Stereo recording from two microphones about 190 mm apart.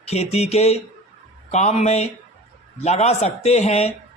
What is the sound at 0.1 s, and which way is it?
A man's voice, 35° left (ahead or behind).